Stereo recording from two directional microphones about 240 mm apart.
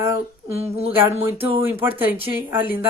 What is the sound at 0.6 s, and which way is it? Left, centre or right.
Speech, right.